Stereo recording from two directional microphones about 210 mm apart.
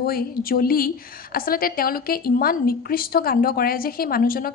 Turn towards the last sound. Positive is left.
turn(degrees=45)  # may be behind; listen again after turning